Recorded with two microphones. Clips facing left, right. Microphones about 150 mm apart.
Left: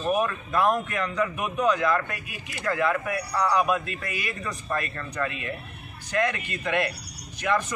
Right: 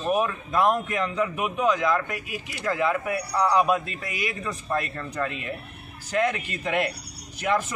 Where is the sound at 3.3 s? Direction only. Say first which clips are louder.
Right 2 dB; 25° right (ahead or behind).